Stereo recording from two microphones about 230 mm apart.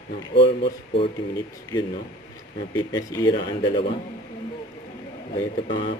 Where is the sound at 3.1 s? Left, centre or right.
Centre.